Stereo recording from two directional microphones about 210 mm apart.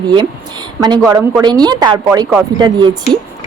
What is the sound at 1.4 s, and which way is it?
Speech, 20° right (ahead or behind).